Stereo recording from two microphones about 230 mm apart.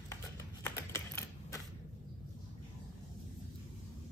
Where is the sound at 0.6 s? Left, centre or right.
Centre.